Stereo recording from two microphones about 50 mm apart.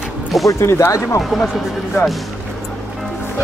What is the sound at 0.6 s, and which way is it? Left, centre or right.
Speech, left.